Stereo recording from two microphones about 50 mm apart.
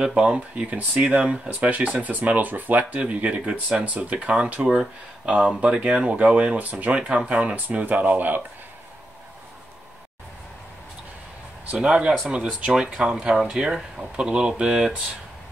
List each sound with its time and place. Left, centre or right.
0.0 s speech: centre
4.6 s speech: right
5.2 s speech: right
11.7 s speech: centre